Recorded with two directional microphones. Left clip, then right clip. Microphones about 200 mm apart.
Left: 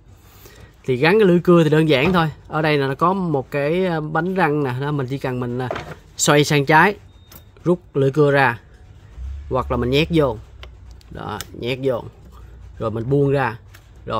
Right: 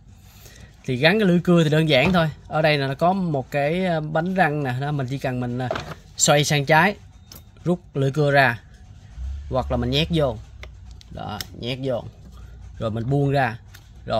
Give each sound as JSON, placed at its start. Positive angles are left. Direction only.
{"t": 0.4, "sound": "speech", "side_deg": 25}
{"t": 12.7, "sound": "speech", "side_deg": 25}